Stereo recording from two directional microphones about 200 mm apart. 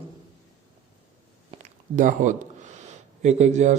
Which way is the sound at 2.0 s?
40° right (ahead or behind).